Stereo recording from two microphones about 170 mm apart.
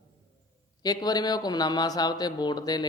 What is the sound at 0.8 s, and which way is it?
Speech, 25° left (ahead or behind).